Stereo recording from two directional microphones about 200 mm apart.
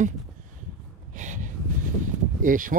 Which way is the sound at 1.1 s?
40° right (ahead or behind).